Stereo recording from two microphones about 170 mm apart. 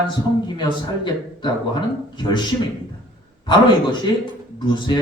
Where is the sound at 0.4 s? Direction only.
25° left (ahead or behind).